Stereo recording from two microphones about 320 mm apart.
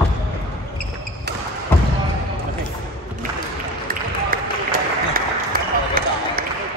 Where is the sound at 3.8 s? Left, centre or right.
Right.